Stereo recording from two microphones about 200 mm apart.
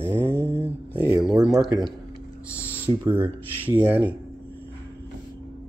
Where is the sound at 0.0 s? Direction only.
10° right (ahead or behind).